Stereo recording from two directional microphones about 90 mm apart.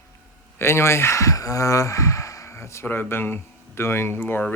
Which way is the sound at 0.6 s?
30° left (ahead or behind).